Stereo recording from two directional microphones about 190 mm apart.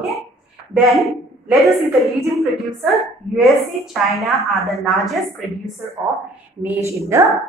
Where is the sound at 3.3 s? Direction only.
Centre (ahead or behind).